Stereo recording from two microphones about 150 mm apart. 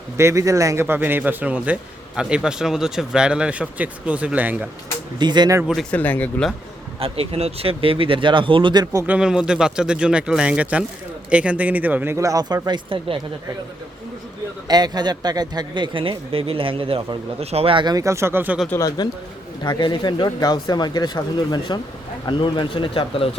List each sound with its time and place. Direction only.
0.2 s a man's voice: 20° right (ahead or behind)
5.2 s a man's voice: 30° right (ahead or behind)
5.9 s speech: 10° left (ahead or behind)
7.0 s speech: 40° right (ahead or behind); by 9.0 s 25° right (ahead or behind)
9.0 s a man's voice: 5° right (ahead or behind); by 13.1 s 35° right (ahead or behind)
14.7 s a man's voice: 25° right (ahead or behind)
18.7 s speech: 25° left (ahead or behind)